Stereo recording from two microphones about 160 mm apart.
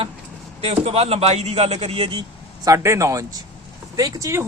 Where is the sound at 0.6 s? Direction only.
40° right (ahead or behind).